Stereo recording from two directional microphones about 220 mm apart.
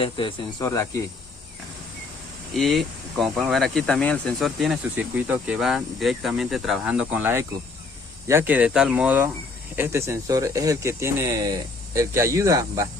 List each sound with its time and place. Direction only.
0.0 s speech: 20° left (ahead or behind)
2.6 s speech: centre (ahead or behind); by 12.9 s 15° right (ahead or behind)